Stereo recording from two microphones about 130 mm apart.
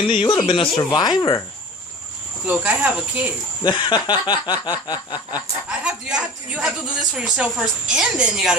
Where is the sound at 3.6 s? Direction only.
35° left (ahead or behind).